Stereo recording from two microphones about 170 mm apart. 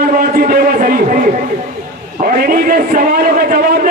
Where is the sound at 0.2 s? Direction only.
55° right (ahead or behind).